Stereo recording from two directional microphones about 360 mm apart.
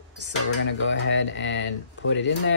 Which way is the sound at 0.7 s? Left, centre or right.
Left.